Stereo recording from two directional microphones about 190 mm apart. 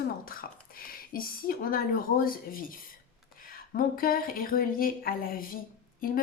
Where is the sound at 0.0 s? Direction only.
50° left (ahead or behind).